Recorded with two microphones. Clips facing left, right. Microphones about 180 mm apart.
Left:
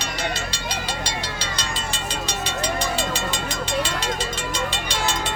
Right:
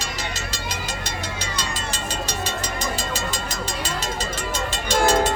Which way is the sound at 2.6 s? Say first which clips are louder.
Left 3 dB; 40° right (ahead or behind).